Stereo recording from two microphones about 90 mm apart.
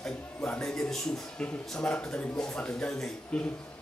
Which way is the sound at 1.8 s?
10° left (ahead or behind).